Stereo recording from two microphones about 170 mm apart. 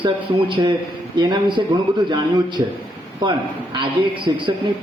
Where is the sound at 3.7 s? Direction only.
30° right (ahead or behind).